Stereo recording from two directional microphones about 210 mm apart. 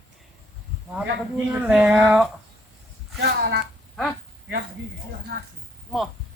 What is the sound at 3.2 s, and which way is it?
Speech, 50° right (ahead or behind).